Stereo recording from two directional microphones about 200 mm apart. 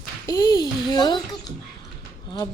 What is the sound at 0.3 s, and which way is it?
Speech, 20° left (ahead or behind).